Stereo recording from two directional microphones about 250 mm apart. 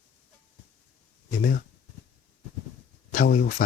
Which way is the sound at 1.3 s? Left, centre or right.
Left.